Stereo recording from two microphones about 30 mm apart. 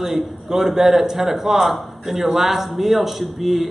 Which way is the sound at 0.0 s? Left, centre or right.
Centre.